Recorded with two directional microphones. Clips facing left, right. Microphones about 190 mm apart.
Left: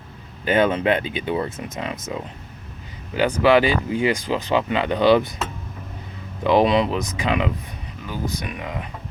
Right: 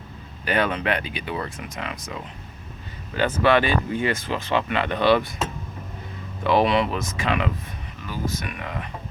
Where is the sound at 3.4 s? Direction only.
15° left (ahead or behind).